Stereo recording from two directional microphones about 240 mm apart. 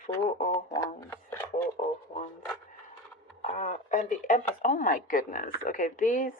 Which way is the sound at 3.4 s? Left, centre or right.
Left.